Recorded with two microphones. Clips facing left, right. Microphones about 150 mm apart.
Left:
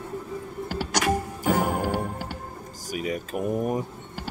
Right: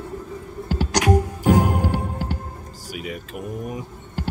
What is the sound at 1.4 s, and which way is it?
Music, 15° right (ahead or behind).